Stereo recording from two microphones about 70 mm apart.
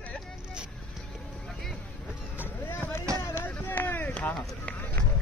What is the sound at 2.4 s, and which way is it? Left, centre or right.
Vehicle, left.